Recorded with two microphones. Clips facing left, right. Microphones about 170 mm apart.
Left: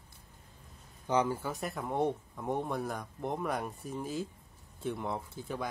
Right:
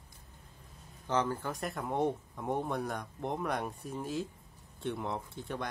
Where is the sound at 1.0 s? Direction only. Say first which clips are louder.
Left 2 dB; 10° left (ahead or behind).